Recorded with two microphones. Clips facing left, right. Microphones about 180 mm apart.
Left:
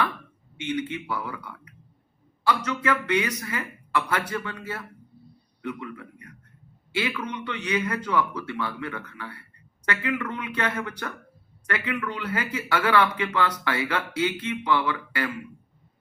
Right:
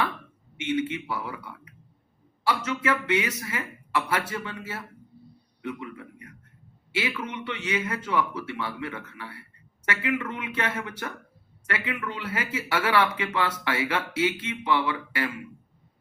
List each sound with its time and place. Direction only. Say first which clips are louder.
0.5 s speech: right 2 dB; 25° right (ahead or behind)